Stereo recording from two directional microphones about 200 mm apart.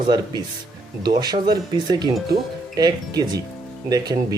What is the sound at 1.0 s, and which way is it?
Speech, 20° right (ahead or behind).